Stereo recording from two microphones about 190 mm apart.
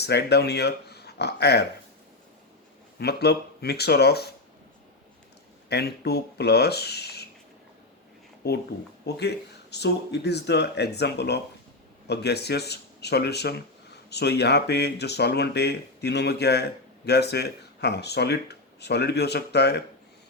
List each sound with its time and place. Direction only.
0.0 s speech: 60° left (ahead or behind)
3.0 s speech: 60° left (ahead or behind)
5.6 s speech: 60° left (ahead or behind)
8.4 s speech: 55° left (ahead or behind)